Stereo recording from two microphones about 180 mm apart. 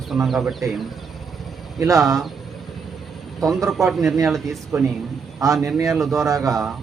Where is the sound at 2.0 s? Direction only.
Centre (ahead or behind).